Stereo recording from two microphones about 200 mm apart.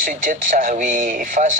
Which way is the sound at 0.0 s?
40° right (ahead or behind).